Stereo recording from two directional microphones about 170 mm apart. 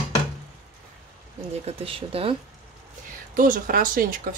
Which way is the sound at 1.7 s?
35° right (ahead or behind).